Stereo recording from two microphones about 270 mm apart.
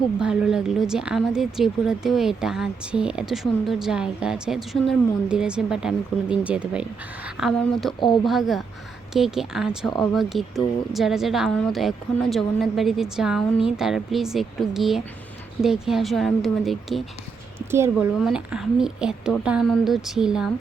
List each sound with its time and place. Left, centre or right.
0.2 s speech: centre
7.9 s speech: centre
8.2 s speech: centre